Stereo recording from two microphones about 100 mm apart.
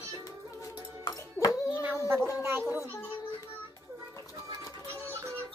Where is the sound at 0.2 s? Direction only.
35° left (ahead or behind).